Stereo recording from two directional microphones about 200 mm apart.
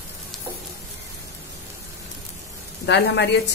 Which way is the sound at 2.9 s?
60° left (ahead or behind).